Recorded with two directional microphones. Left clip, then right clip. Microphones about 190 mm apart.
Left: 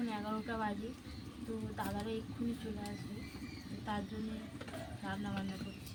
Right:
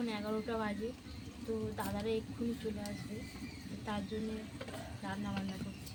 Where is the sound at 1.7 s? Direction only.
15° right (ahead or behind).